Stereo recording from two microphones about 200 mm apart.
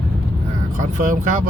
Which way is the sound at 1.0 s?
40° right (ahead or behind).